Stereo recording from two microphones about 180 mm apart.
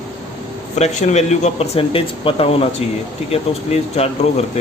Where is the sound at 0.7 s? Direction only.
40° left (ahead or behind).